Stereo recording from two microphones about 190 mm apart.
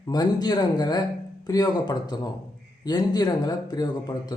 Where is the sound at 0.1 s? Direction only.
20° left (ahead or behind).